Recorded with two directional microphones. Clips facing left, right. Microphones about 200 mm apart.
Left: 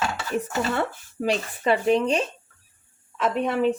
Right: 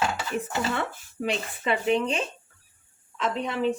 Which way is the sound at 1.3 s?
40° left (ahead or behind).